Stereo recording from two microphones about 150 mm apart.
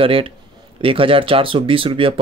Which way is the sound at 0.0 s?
35° right (ahead or behind).